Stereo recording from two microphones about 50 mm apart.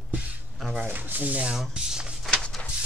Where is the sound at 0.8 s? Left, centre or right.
Right.